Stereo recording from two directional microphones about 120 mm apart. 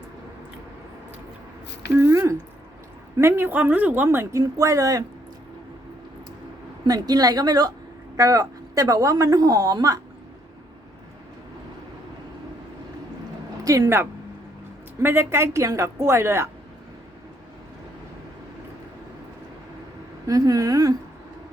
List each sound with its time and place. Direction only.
2.0 s a woman's voice: 20° right (ahead or behind)
6.8 s a woman's voice: 30° right (ahead or behind)
13.7 s a woman's voice: 30° right (ahead or behind)
20.2 s a woman's voice: 30° right (ahead or behind)